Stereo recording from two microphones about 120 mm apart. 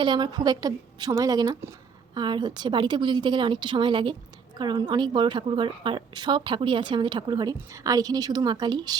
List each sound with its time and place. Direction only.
0.0 s a woman's voice: 40° right (ahead or behind)